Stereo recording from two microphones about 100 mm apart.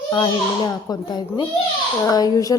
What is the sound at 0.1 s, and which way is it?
A woman's voice, 50° left (ahead or behind).